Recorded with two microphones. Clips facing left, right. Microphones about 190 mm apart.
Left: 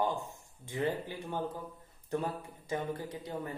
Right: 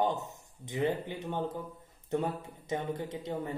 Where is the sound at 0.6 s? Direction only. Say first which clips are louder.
Right 2 dB; 20° right (ahead or behind).